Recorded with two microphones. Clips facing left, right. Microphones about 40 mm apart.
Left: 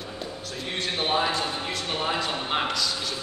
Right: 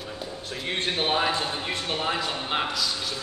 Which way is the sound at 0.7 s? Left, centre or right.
Right.